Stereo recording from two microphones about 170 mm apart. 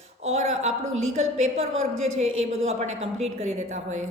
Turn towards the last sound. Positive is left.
turn(degrees=-40)  # may be behind; listen again after turning